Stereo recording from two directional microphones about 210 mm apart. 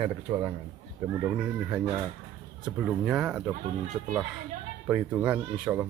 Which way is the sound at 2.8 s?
5° right (ahead or behind).